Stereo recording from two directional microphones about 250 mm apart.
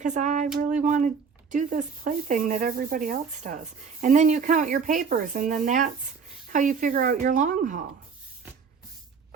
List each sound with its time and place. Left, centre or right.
0.0 s speech: right